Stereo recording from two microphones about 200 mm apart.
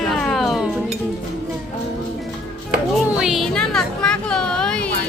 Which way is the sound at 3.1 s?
5° right (ahead or behind).